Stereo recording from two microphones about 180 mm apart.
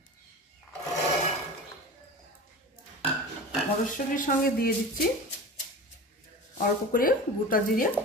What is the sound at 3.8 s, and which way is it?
Speech, 50° left (ahead or behind).